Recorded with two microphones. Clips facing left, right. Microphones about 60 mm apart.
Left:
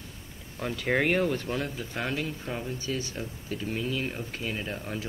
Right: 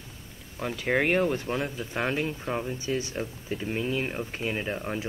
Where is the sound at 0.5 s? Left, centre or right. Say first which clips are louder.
Right 1 dB; centre.